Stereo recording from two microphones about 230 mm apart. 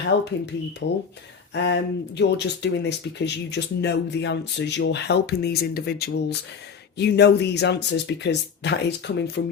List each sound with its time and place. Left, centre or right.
0.1 s speech: left